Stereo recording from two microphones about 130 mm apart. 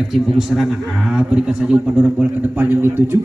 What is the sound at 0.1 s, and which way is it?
A man's voice, centre (ahead or behind).